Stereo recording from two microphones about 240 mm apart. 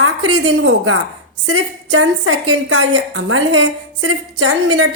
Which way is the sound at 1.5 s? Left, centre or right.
Right.